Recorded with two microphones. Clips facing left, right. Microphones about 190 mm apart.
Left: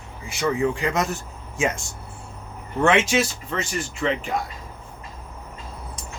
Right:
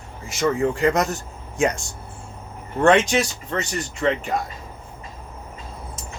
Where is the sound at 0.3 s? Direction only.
Centre (ahead or behind).